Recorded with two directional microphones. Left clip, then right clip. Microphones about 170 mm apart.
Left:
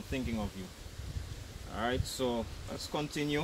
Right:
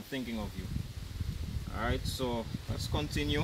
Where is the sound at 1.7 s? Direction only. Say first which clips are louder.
Left 1 dB; 5° left (ahead or behind).